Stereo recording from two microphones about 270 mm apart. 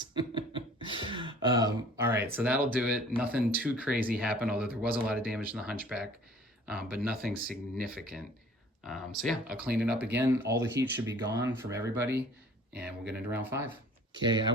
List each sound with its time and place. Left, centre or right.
0.0 s beatboxing: centre
0.9 s throat clearing: centre
2.3 s speech: centre